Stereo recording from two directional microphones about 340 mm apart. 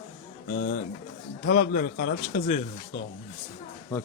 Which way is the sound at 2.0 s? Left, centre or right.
Left.